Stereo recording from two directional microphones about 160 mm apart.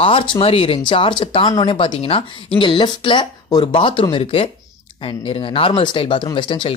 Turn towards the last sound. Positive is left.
turn(degrees=30)  # may be behind; listen again after turning